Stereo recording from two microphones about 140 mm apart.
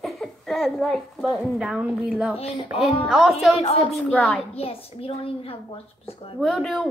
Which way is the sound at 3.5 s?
45° left (ahead or behind).